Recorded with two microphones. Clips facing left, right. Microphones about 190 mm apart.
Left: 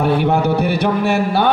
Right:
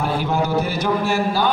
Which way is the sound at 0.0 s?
65° left (ahead or behind).